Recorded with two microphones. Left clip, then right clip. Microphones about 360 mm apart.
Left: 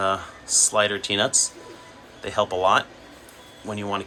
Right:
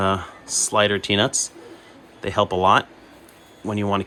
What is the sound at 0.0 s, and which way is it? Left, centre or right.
Speech, centre.